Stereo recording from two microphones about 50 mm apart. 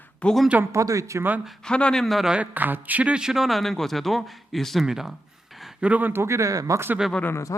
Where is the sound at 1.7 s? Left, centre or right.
Centre.